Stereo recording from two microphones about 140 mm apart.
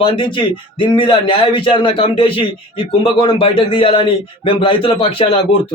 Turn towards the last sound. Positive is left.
turn(degrees=40)  # may be behind; listen again after turning